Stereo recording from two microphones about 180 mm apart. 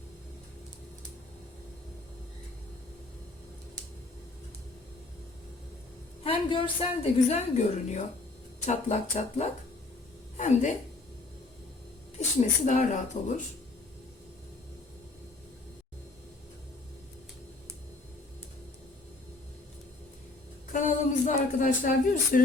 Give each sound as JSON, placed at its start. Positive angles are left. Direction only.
{"t": 6.2, "sound": "a woman's voice", "side_deg": 30}
{"t": 12.4, "sound": "speech", "side_deg": 40}
{"t": 20.7, "sound": "a sound", "side_deg": 45}